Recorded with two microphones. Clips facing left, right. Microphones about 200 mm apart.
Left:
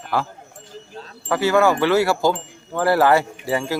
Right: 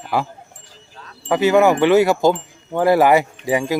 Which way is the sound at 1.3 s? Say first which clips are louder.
Right 3 dB; 20° right (ahead or behind).